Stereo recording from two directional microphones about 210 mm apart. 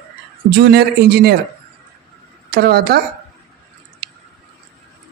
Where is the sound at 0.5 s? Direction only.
50° right (ahead or behind).